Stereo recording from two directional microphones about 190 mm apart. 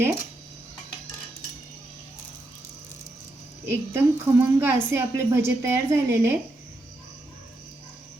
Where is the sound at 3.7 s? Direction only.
10° right (ahead or behind).